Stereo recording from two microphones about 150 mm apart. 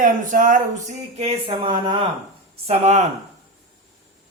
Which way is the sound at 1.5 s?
25° right (ahead or behind).